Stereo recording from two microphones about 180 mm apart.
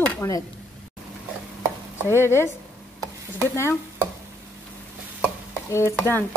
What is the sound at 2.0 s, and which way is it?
A woman's voice, 15° left (ahead or behind).